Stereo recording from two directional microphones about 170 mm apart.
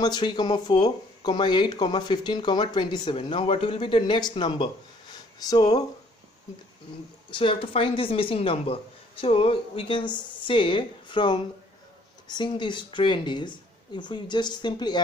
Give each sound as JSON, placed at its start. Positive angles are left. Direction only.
{"t": 0.0, "sound": "speech", "side_deg": 25}
{"t": 7.2, "sound": "speech", "side_deg": 30}